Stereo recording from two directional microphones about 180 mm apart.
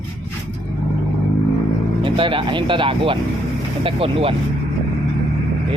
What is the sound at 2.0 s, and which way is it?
Speech, 30° right (ahead or behind).